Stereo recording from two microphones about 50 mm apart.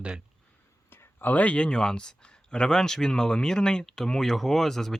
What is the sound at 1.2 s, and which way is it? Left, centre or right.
Speech, left.